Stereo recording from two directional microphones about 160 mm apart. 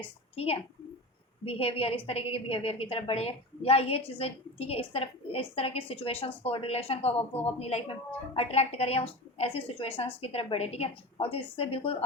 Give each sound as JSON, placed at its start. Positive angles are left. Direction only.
{"t": 0.3, "sound": "speech", "side_deg": 40}